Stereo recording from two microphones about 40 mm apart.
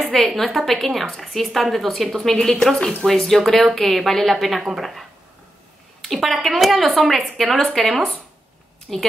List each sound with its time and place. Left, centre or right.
0.4 s a woman's voice: centre
6.0 s a woman's voice: centre